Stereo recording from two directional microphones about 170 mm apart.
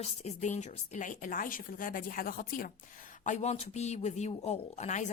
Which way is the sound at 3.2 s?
45° left (ahead or behind).